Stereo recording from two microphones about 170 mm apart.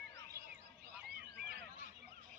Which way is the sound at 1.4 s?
65° right (ahead or behind).